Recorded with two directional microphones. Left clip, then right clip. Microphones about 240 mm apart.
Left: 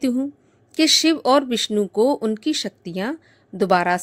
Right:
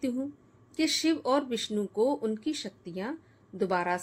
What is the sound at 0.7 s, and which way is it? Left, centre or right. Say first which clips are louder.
A woman's voice: left 11 dB; left.